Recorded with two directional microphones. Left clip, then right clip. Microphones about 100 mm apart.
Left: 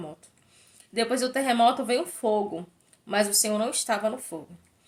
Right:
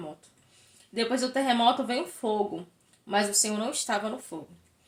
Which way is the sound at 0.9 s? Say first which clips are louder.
Left 2 dB; 25° left (ahead or behind).